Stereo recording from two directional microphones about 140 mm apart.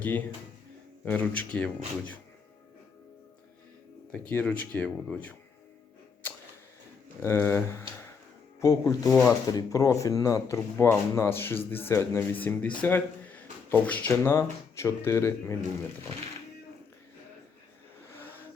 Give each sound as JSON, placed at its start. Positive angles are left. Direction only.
{"t": 0.0, "sound": "speech", "side_deg": 10}
{"t": 4.1, "sound": "speech", "side_deg": 10}
{"t": 7.2, "sound": "speech", "side_deg": 15}
{"t": 14.3, "sound": "speech", "side_deg": 20}
{"t": 18.2, "sound": "vehicle", "side_deg": 15}